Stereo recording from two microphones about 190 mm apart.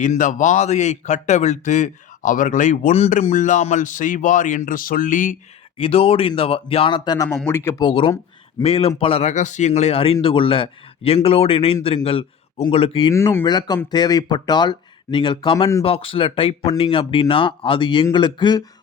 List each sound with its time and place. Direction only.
0.0 s a man's voice: 40° left (ahead or behind)
5.7 s speech: 30° left (ahead or behind)
7.3 s speech: 10° left (ahead or behind)
7.8 s a man's voice: 25° left (ahead or behind)
13.1 s speech: 15° left (ahead or behind)